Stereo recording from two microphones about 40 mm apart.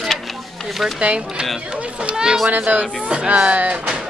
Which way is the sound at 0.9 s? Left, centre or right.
Right.